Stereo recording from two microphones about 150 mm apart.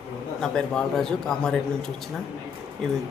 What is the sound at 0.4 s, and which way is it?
Speech, 5° left (ahead or behind).